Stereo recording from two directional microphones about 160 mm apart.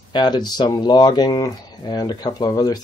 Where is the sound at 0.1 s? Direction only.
25° left (ahead or behind).